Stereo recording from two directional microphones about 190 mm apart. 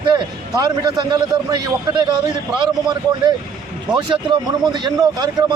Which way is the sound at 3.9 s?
25° right (ahead or behind).